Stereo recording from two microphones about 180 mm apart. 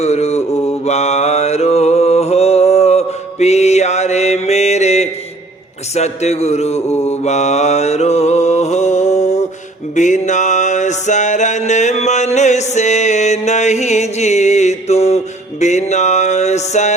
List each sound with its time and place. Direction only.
0.0 s mantra: 35° left (ahead or behind)
5.9 s music: 35° left (ahead or behind)
7.0 s mantra: 40° left (ahead or behind)
9.9 s music: 40° left (ahead or behind)